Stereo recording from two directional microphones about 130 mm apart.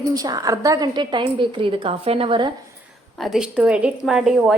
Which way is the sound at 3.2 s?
Centre (ahead or behind).